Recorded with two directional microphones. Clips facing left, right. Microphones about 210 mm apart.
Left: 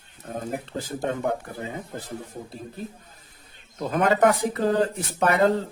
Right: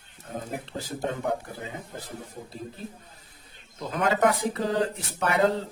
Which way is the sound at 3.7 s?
50° left (ahead or behind).